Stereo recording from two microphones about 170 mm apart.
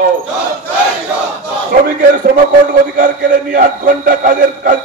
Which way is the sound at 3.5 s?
50° right (ahead or behind).